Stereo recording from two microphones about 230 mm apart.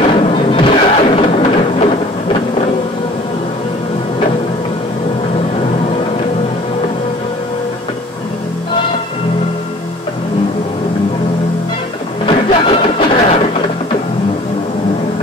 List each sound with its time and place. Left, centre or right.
0.0 s music: left
12.3 s music: left